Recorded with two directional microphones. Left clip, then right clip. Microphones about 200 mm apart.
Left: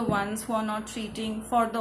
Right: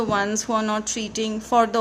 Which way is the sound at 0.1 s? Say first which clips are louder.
Right 6 dB; 45° right (ahead or behind).